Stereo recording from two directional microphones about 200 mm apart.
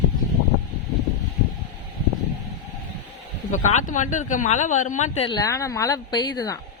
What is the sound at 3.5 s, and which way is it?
Speech, 40° left (ahead or behind).